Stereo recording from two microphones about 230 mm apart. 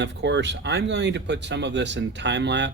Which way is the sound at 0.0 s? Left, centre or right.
Right.